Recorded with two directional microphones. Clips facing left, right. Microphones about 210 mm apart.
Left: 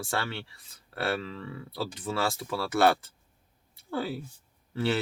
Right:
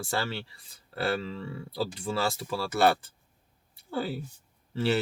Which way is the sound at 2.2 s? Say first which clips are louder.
Even; centre (ahead or behind).